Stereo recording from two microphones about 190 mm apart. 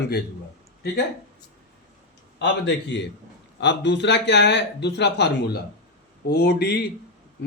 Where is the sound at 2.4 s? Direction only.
65° left (ahead or behind).